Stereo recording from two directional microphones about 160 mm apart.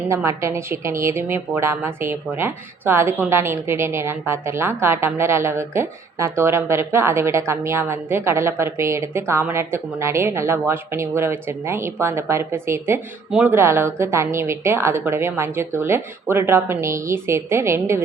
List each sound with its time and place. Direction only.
0.1 s a woman's voice: 15° right (ahead or behind)